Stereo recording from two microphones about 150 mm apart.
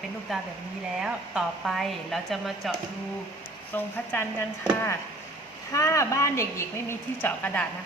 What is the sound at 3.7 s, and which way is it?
Speech, 15° left (ahead or behind).